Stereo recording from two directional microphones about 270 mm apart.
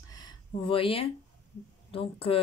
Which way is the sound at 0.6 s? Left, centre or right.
Centre.